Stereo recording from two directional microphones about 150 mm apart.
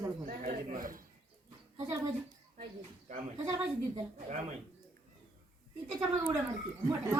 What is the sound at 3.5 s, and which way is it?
Speech, 25° right (ahead or behind).